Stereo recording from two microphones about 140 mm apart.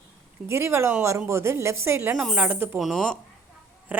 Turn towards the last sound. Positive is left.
turn(degrees=0)  # may be behind; listen again after turning